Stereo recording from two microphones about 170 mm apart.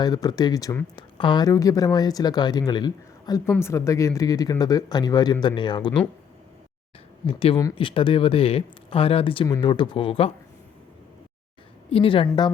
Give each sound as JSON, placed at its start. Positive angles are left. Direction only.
{"t": 0.0, "sound": "speech", "side_deg": 25}
{"t": 7.3, "sound": "speech", "side_deg": 35}
{"t": 11.9, "sound": "speech", "side_deg": 30}